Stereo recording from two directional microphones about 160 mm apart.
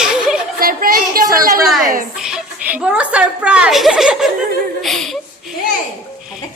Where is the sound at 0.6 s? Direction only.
65° right (ahead or behind).